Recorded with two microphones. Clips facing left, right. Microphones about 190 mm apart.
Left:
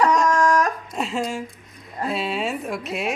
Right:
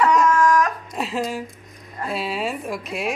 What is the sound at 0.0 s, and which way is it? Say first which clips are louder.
Dog: right 1 dB; 40° left (ahead or behind).